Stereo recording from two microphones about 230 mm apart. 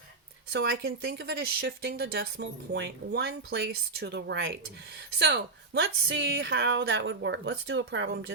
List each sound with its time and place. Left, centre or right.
0.5 s speech: right